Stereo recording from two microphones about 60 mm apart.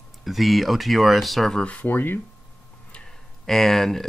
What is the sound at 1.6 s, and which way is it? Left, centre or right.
Speech, left.